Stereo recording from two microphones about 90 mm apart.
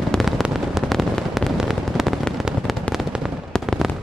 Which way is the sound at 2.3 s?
Centre (ahead or behind).